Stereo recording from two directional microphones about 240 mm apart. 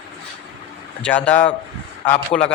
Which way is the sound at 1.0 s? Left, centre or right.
Centre.